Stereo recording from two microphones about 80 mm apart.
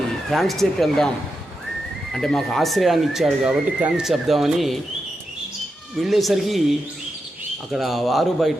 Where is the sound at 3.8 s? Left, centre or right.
Centre.